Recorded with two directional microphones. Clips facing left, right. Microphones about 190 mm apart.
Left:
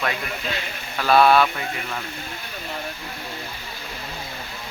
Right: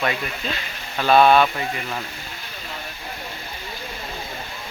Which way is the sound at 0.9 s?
20° right (ahead or behind).